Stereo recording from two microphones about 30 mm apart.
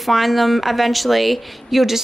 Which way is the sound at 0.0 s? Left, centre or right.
Centre.